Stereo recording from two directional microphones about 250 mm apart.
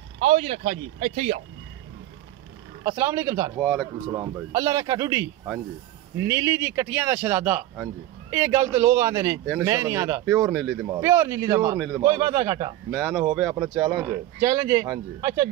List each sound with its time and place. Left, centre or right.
0.2 s speech: right
2.8 s speech: centre
3.5 s speech: centre
4.1 s speech: centre
10.9 s speech: centre
12.9 s speech: centre